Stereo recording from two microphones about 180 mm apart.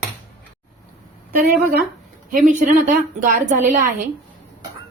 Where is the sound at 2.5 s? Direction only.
45° right (ahead or behind).